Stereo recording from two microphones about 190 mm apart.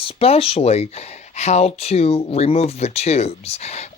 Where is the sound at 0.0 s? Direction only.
30° left (ahead or behind).